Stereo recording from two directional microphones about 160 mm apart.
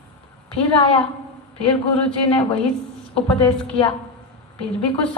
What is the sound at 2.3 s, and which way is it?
Speech, 35° left (ahead or behind).